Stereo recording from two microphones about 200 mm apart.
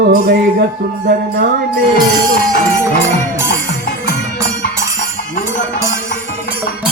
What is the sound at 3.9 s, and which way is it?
Music, 55° left (ahead or behind).